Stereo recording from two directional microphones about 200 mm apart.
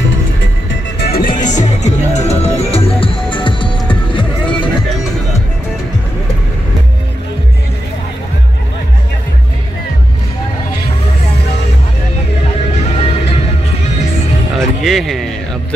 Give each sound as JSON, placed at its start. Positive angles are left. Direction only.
{"t": 0.9, "sound": "music", "side_deg": 45}
{"t": 14.5, "sound": "music", "side_deg": 0}